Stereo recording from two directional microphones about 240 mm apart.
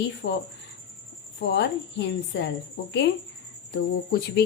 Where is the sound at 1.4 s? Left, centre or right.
Left.